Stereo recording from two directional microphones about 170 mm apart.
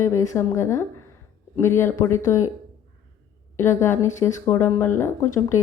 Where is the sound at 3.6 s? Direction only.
15° left (ahead or behind).